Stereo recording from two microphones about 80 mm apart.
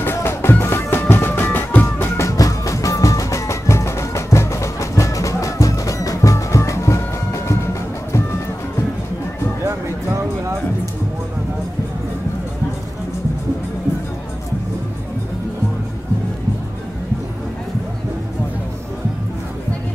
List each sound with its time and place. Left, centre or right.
0.0 s music: left
2.1 s music: left